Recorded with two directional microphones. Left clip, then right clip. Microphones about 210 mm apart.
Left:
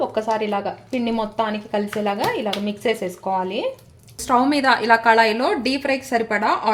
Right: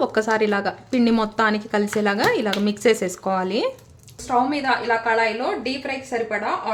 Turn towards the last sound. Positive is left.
turn(degrees=55)  # may be behind; listen again after turning